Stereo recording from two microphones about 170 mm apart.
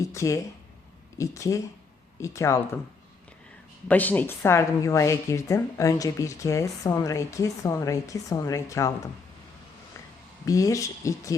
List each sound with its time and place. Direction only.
0.0 s speech: 20° left (ahead or behind)
3.8 s speech: 10° left (ahead or behind)
10.4 s speech: 20° left (ahead or behind)